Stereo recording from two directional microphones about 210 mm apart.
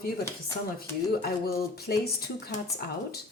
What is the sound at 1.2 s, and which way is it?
Speech, 45° left (ahead or behind).